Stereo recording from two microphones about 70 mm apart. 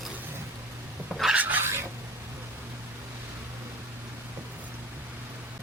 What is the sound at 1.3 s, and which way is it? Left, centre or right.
Filing, right.